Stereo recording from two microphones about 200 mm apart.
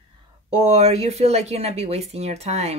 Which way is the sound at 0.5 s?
30° right (ahead or behind).